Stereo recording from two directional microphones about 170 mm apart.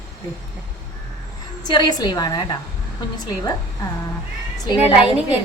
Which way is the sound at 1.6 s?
25° left (ahead or behind).